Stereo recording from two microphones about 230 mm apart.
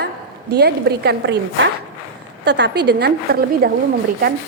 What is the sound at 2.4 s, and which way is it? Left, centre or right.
A woman's voice, right.